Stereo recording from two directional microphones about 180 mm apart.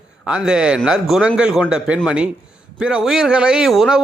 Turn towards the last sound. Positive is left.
turn(degrees=0)  # may be behind; listen again after turning